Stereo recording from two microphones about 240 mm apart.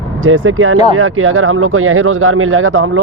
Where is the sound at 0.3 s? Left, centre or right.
Right.